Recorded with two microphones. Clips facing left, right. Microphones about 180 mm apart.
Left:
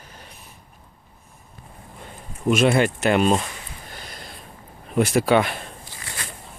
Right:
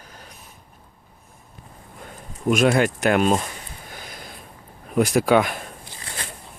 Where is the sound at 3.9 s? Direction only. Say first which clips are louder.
Right 2 dB; 5° right (ahead or behind).